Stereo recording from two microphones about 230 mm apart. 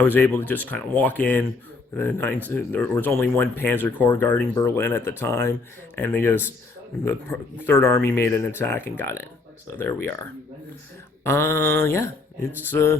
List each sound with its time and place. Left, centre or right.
0.0 s speech: centre
11.2 s speech: centre